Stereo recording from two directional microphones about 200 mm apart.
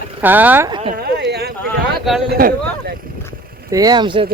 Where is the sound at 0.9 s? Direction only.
55° right (ahead or behind).